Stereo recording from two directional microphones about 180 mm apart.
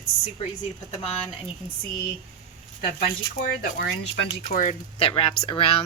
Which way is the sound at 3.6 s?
65° left (ahead or behind).